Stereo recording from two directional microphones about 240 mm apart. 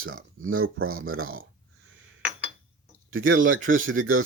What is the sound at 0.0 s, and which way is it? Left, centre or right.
Speech, right.